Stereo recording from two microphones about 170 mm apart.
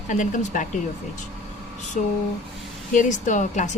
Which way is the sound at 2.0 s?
45° left (ahead or behind).